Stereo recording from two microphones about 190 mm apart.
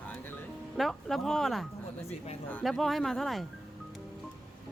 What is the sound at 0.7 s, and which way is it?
Speech, centre (ahead or behind).